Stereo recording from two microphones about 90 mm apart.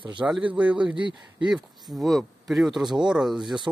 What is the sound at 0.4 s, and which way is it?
Speech, 15° right (ahead or behind).